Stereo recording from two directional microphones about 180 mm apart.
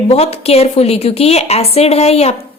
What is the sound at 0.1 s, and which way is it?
A woman's voice, 35° left (ahead or behind).